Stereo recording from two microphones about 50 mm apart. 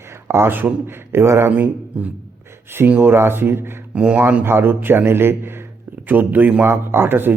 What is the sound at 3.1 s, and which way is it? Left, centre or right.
Speech, right.